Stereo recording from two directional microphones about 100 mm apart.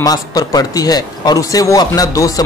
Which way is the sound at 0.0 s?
40° left (ahead or behind).